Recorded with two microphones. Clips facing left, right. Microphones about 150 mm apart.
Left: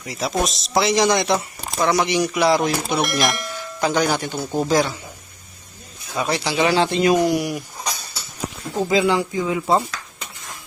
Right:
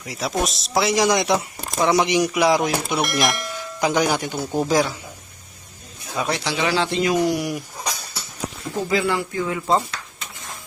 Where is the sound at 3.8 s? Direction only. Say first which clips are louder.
Even; 15° right (ahead or behind).